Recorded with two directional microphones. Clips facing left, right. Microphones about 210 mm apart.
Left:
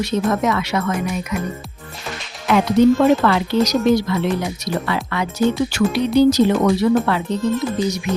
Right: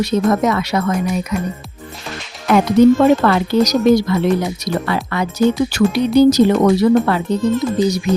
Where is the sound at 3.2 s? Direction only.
45° right (ahead or behind).